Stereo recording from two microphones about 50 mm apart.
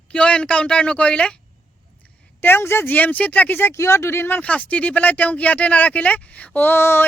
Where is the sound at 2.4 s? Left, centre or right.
Left.